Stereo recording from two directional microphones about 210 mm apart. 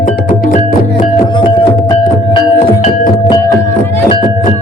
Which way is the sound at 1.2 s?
20° left (ahead or behind).